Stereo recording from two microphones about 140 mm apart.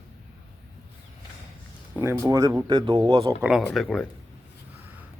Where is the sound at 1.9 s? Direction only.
20° right (ahead or behind); by 3.3 s 35° right (ahead or behind).